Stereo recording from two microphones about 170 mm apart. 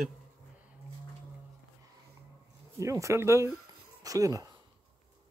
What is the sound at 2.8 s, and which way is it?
Speech, 20° right (ahead or behind).